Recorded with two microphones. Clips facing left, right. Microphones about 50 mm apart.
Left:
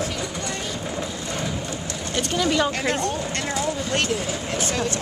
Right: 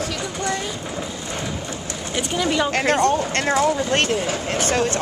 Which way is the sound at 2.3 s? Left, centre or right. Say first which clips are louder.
Even; centre.